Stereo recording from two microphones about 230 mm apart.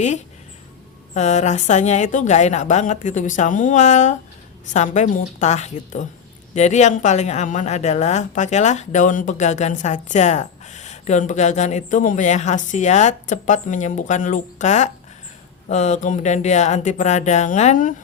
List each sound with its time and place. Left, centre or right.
1.1 s speech: left